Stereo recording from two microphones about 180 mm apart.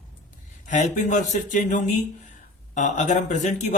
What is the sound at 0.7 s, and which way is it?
Speech, 45° left (ahead or behind).